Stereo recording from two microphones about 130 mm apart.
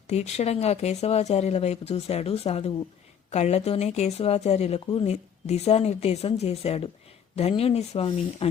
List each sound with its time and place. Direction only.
0.1 s speech: 55° left (ahead or behind)